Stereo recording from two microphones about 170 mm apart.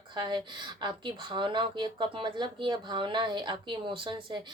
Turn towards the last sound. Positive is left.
turn(degrees=-30)  # may be behind; listen again after turning